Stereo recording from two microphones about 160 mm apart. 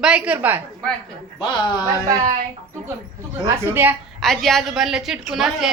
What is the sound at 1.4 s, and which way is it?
Speech, 30° left (ahead or behind).